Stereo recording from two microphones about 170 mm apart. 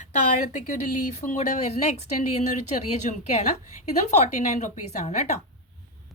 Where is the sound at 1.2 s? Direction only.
45° left (ahead or behind).